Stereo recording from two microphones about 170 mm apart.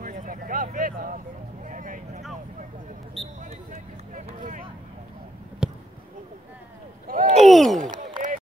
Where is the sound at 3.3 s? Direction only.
50° right (ahead or behind).